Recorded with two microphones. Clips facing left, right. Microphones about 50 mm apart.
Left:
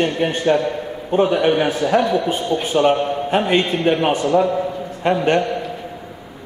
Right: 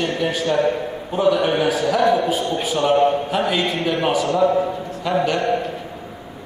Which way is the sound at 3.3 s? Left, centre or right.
Left.